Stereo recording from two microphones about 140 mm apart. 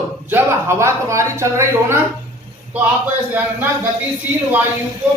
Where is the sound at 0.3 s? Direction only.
15° right (ahead or behind).